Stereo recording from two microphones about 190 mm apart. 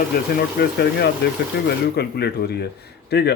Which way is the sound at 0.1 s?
50° left (ahead or behind).